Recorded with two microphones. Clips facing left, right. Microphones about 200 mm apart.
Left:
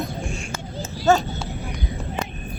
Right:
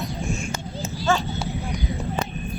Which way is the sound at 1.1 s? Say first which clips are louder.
Left 5 dB; 40° left (ahead or behind).